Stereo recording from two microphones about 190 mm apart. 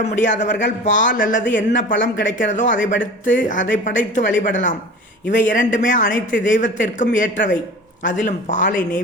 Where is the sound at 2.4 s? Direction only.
40° left (ahead or behind).